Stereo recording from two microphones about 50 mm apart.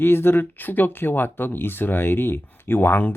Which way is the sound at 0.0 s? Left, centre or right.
Left.